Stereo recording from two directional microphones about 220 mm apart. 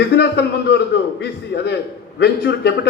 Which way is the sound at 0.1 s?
50° left (ahead or behind).